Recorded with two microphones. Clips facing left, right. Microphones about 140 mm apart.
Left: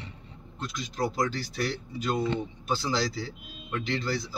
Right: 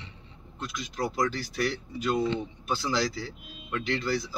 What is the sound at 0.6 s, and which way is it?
Speech, 30° left (ahead or behind).